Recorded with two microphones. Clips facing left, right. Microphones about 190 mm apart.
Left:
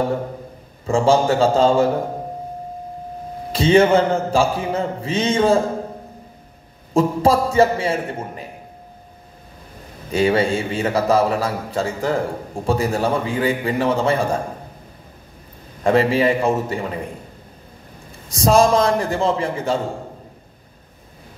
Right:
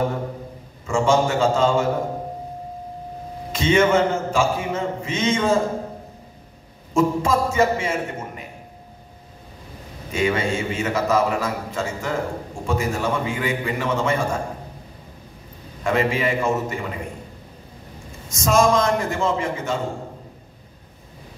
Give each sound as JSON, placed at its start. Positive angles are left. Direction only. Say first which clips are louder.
{"t": 0.8, "sound": "a man's voice", "louder": "left 3 dB", "side_deg": 35}
{"t": 3.5, "sound": "a man's voice", "louder": "left 4 dB", "side_deg": 35}
{"t": 6.9, "sound": "a man's voice", "louder": "left 3 dB", "side_deg": 35}
{"t": 10.1, "sound": "a man's voice", "louder": "left 5 dB", "side_deg": 35}
{"t": 15.8, "sound": "a man's voice", "louder": "left 5 dB", "side_deg": 35}
{"t": 18.3, "sound": "a man's voice", "louder": "left 3 dB", "side_deg": 35}